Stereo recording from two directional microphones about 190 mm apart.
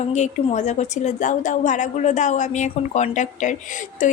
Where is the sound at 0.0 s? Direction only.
40° left (ahead or behind).